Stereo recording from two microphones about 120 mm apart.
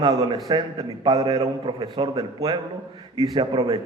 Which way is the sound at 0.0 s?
35° right (ahead or behind).